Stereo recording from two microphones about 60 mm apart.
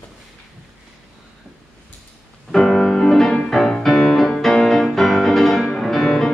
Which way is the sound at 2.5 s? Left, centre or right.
Centre.